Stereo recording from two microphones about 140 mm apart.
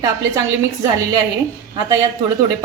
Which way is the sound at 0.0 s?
25° right (ahead or behind).